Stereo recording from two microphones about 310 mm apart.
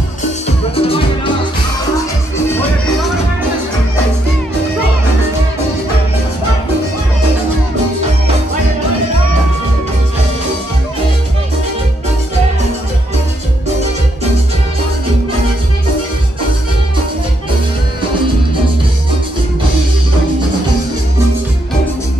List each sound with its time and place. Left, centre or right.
0.7 s music: centre